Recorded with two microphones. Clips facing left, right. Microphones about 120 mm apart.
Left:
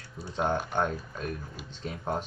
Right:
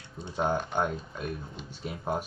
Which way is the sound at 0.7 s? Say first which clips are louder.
Even; 5° right (ahead or behind).